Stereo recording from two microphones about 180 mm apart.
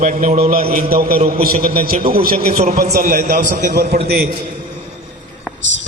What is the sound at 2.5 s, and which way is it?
Speech, 40° right (ahead or behind).